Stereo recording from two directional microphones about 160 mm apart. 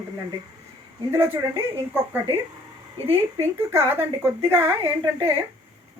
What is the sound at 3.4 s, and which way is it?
Speech, 15° right (ahead or behind).